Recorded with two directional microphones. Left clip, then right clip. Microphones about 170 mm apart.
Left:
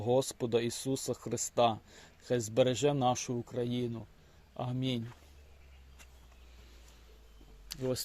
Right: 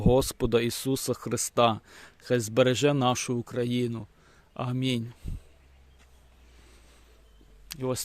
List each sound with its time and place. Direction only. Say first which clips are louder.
0.0 s speech: right 6 dB; 60° right (ahead or behind)
7.7 s speech: right 4 dB; 40° right (ahead or behind)